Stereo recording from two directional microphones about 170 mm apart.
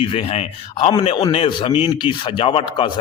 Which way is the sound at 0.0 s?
35° left (ahead or behind).